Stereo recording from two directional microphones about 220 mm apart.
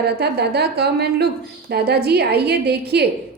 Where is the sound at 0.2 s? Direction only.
50° right (ahead or behind).